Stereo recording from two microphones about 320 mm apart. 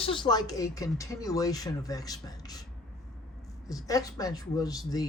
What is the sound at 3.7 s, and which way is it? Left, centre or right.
Speech, centre.